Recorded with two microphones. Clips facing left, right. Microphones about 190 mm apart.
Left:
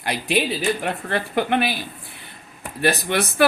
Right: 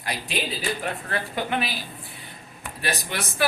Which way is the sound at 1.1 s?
65° left (ahead or behind).